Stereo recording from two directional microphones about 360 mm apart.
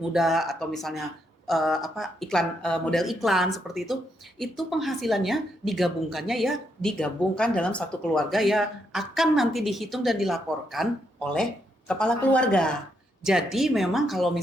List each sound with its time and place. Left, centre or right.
0.1 s a woman's voice: centre